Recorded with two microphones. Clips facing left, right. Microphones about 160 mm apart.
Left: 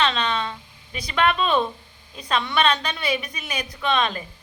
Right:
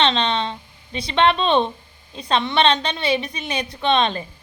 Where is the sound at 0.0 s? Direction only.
25° right (ahead or behind).